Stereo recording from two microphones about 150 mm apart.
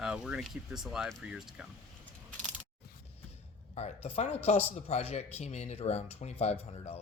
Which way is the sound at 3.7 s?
45° left (ahead or behind).